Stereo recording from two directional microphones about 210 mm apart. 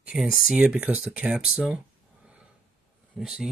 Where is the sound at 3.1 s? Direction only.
Centre (ahead or behind).